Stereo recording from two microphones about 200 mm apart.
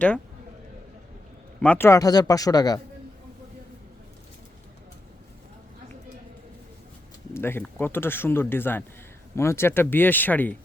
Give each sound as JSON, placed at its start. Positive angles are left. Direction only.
{"t": 1.6, "sound": "speech", "side_deg": 10}
{"t": 7.3, "sound": "speech", "side_deg": 10}